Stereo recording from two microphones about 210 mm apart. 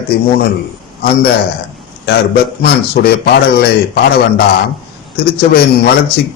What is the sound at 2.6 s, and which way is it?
A man's voice, 50° left (ahead or behind).